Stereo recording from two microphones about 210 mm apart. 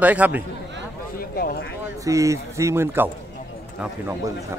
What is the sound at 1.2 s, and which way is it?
Speech, 45° left (ahead or behind).